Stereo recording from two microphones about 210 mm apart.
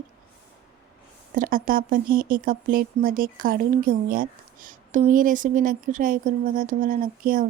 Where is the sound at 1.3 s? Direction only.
40° right (ahead or behind).